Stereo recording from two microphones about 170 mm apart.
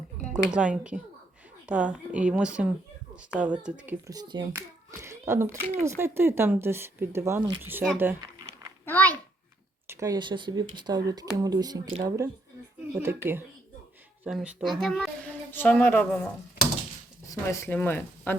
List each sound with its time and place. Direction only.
0.3 s speech: 5° right (ahead or behind)
4.0 s speech: 25° right (ahead or behind)
8.8 s a sound: 10° left (ahead or behind)
9.8 s speech: 15° right (ahead or behind)
14.3 s a child's voice: centre (ahead or behind)